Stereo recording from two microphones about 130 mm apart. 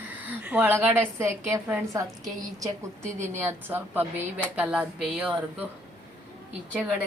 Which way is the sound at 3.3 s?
15° right (ahead or behind).